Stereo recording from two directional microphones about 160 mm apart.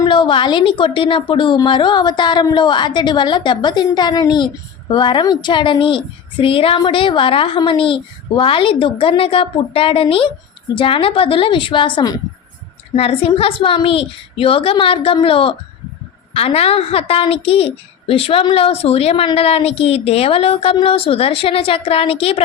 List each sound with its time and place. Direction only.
0.0 s a woman's voice: 30° left (ahead or behind)